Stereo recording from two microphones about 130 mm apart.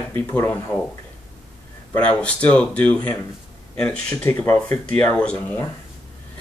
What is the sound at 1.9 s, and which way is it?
Speech, 10° left (ahead or behind).